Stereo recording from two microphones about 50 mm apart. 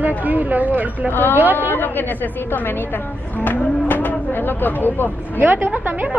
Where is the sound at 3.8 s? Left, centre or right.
Left.